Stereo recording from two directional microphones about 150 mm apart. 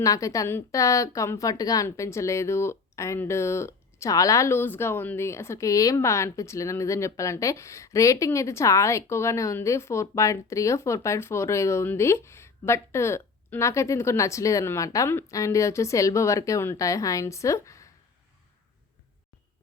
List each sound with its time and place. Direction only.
0.0 s a woman's voice: 20° left (ahead or behind)